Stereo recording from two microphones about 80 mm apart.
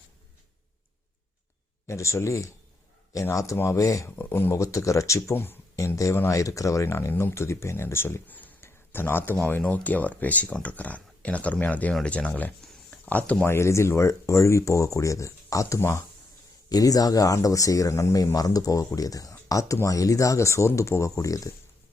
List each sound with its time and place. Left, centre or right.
1.9 s speech: left
4.2 s speech: left
4.5 s speech: left
6.1 s speech: left; by 13.5 s centre
13.5 s speech: left
16.6 s speech: left